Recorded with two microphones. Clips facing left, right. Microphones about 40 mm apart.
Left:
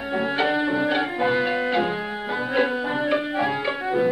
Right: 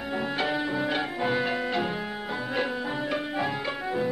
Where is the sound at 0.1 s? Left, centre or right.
Centre.